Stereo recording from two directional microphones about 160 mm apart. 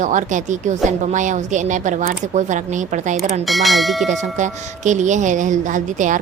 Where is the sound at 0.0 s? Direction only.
50° right (ahead or behind).